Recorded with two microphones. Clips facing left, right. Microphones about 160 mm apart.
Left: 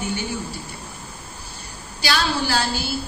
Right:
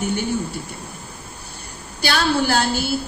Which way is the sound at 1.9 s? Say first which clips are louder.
Right 3 dB; 55° right (ahead or behind).